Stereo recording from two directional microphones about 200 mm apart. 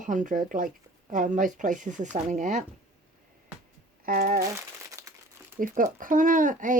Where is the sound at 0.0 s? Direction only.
40° right (ahead or behind).